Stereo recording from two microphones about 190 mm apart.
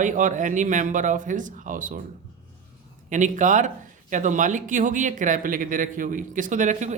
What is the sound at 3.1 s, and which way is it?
Speech, 40° right (ahead or behind).